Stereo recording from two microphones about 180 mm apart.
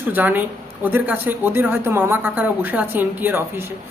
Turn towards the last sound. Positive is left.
turn(degrees=-10)  # may be behind; listen again after turning